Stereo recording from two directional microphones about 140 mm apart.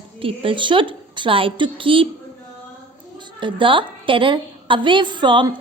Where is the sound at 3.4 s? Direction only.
35° right (ahead or behind).